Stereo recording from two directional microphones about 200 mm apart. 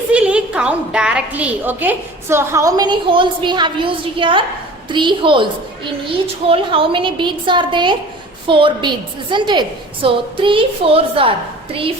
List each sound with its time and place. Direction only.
0.1 s a woman's voice: 5° right (ahead or behind); by 11.3 s 25° right (ahead or behind)